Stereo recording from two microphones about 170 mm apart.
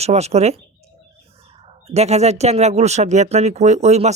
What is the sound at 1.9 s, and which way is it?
Speech, 40° right (ahead or behind).